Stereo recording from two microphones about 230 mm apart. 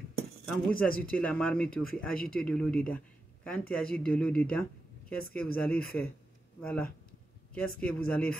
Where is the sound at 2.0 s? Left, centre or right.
Left.